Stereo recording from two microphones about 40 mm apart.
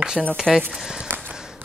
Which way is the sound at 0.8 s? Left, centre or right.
Centre.